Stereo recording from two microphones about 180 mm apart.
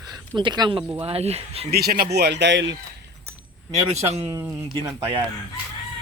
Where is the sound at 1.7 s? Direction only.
60° right (ahead or behind); by 2.7 s 80° right.